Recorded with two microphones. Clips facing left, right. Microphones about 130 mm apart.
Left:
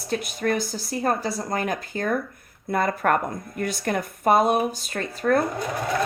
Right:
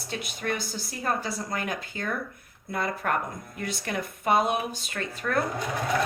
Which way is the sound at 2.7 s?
55° left (ahead or behind).